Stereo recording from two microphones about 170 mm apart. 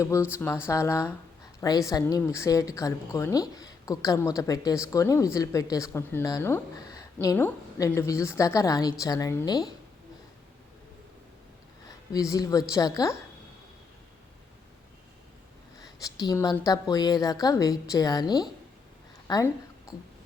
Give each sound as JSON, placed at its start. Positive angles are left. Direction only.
{"t": 0.0, "sound": "a woman's voice", "side_deg": 15}
{"t": 12.3, "sound": "a woman's voice", "side_deg": 20}
{"t": 15.8, "sound": "a woman's voice", "side_deg": 25}